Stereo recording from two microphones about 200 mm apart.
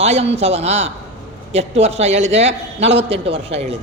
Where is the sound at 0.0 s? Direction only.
30° right (ahead or behind).